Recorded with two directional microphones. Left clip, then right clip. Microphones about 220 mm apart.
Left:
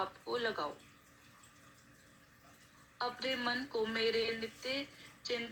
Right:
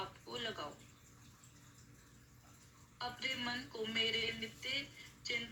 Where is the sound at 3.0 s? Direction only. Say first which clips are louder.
Left 4 dB; 15° left (ahead or behind).